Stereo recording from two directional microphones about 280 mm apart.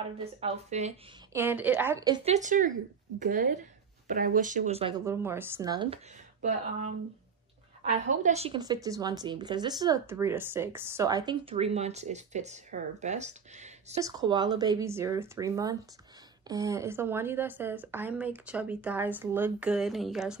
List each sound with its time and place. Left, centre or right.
0.4 s speech: right
1.3 s speech: centre
8.0 s speech: right; by 20.3 s centre